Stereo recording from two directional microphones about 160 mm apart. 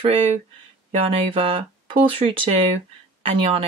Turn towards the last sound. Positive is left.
turn(degrees=-35)  # may be behind; listen again after turning